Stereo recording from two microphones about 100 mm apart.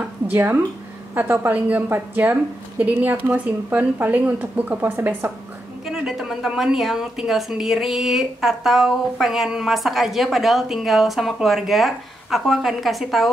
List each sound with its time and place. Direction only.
0.3 s speech: 20° right (ahead or behind)
5.9 s speech: 5° right (ahead or behind)